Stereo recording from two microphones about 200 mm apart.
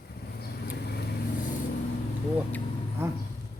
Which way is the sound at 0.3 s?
50° left (ahead or behind).